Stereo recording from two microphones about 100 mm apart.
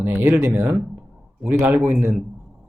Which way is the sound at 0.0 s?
15° right (ahead or behind).